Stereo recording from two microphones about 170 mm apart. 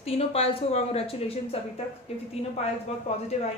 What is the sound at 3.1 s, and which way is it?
Speech, 40° left (ahead or behind).